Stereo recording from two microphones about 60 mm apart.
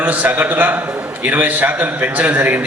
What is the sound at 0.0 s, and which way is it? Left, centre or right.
A man's voice, right.